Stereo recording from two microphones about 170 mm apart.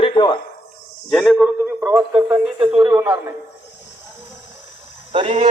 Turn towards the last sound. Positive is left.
turn(degrees=-30)  # may be behind; listen again after turning